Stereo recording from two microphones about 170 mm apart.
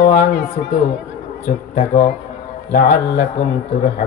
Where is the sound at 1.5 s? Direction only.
55° left (ahead or behind).